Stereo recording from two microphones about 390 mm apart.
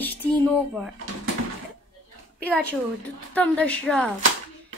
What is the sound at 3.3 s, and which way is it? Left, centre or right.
Speech, centre.